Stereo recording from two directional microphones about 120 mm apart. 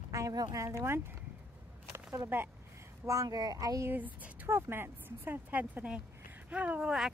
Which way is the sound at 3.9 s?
15° right (ahead or behind).